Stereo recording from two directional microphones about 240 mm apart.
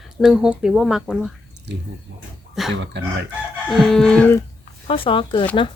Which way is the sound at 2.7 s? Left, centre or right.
Right.